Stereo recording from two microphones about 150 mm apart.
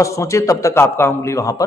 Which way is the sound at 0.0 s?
20° left (ahead or behind).